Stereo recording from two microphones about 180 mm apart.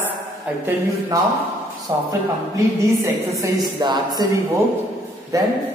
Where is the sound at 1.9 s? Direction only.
20° right (ahead or behind).